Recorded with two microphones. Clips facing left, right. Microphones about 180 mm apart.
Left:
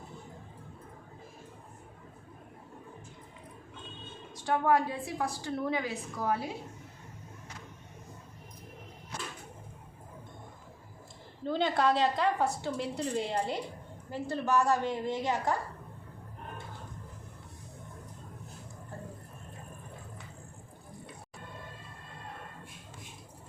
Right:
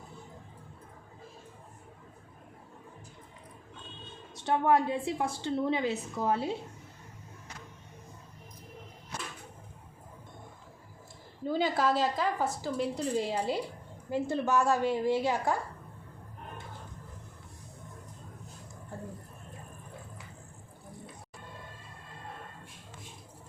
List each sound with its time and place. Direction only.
4.4 s a woman's voice: 25° right (ahead or behind)
11.4 s a woman's voice: 5° right (ahead or behind)
14.1 s a woman's voice: 15° right (ahead or behind)